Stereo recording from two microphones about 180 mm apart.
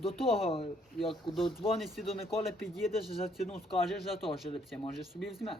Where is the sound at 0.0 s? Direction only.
30° left (ahead or behind).